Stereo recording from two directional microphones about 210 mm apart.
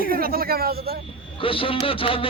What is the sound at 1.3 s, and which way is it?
Speech, 25° left (ahead or behind).